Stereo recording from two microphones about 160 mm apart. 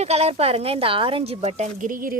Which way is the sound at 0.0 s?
40° right (ahead or behind).